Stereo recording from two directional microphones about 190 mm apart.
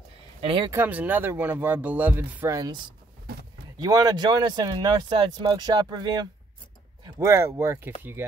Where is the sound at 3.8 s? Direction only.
20° right (ahead or behind).